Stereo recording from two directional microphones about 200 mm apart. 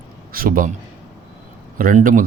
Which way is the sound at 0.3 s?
45° right (ahead or behind).